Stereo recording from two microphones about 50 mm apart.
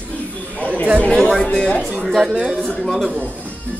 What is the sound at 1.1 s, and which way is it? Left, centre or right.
Speech, centre.